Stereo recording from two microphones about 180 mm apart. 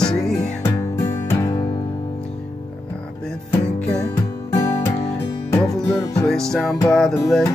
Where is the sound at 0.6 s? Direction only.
15° left (ahead or behind).